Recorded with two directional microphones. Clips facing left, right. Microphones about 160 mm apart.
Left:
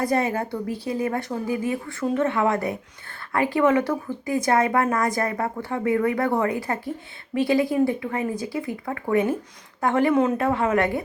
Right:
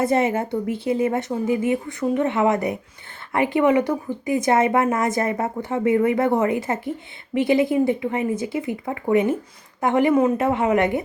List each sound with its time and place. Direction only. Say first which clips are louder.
0.0 s a woman's voice: right 3 dB; 25° right (ahead or behind)